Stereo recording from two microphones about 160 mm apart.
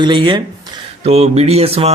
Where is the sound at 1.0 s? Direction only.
40° right (ahead or behind).